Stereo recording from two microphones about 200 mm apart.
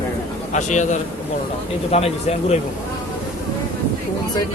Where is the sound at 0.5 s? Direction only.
35° left (ahead or behind).